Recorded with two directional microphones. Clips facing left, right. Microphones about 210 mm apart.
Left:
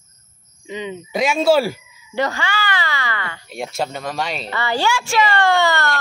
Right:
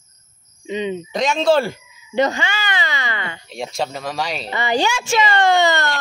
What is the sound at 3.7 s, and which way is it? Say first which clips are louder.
Speech: even; centre (ahead or behind).